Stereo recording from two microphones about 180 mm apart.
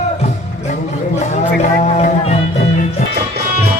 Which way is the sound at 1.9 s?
40° left (ahead or behind).